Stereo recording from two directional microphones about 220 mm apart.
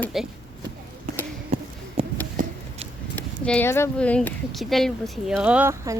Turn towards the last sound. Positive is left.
turn(degrees=-10)  # may be behind; listen again after turning